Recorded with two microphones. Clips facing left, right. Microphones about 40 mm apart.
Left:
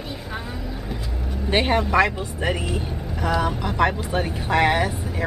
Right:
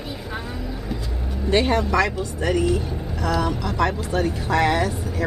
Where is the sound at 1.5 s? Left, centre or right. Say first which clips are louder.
Even; left.